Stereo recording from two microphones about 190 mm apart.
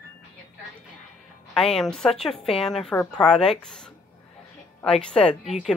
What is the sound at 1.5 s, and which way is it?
Speech, 5° left (ahead or behind).